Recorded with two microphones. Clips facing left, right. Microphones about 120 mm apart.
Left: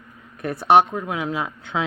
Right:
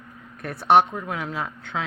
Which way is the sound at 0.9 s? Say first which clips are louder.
Left 4 dB; 15° left (ahead or behind).